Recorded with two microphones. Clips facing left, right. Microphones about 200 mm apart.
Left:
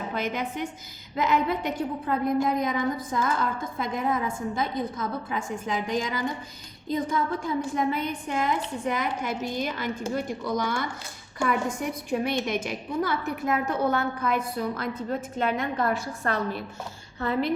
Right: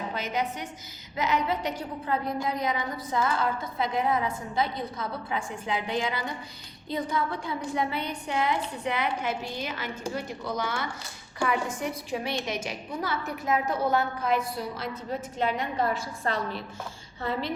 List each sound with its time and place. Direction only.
0.2 s a woman's voice: 50° left (ahead or behind)